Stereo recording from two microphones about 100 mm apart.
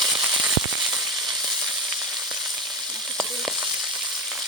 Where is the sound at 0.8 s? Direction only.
Centre (ahead or behind).